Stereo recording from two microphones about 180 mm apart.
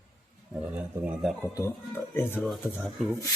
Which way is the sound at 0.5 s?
10° right (ahead or behind).